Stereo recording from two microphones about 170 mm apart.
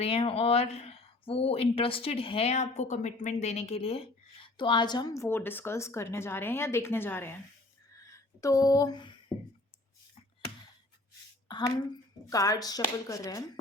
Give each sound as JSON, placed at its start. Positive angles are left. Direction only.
{"t": 0.0, "sound": "speech", "side_deg": 35}
{"t": 7.9, "sound": "a sound", "side_deg": 15}
{"t": 12.3, "sound": "speech", "side_deg": 20}